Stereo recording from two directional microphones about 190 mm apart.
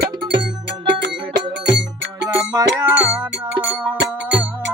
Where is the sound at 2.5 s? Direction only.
15° right (ahead or behind).